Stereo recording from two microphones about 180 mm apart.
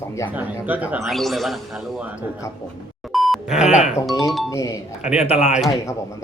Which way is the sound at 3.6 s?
40° left (ahead or behind).